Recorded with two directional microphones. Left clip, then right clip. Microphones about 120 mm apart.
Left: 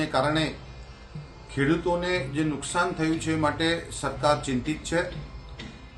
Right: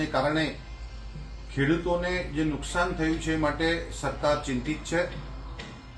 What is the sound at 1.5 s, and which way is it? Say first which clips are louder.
A man's voice: left 1 dB; 15° left (ahead or behind).